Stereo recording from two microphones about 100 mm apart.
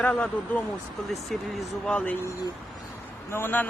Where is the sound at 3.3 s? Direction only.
20° left (ahead or behind).